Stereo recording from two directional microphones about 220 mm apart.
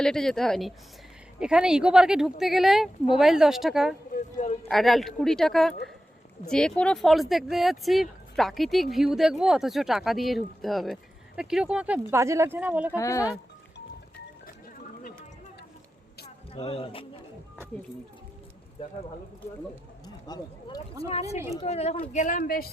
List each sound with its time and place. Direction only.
0.0 s speech: 5° left (ahead or behind)
4.1 s a sound: 35° left (ahead or behind)
4.7 s speech: centre (ahead or behind)
13.0 s speech: 15° left (ahead or behind)
16.2 s a sound: 25° left (ahead or behind)
20.2 s speech: 20° left (ahead or behind)
21.0 s speech: 30° left (ahead or behind)
21.2 s speech: 15° right (ahead or behind)
21.6 s speech: 30° left (ahead or behind)